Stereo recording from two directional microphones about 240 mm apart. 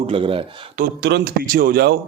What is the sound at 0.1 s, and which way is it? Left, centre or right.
Speech, right.